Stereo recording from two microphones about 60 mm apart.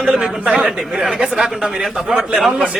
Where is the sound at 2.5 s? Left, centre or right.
Centre.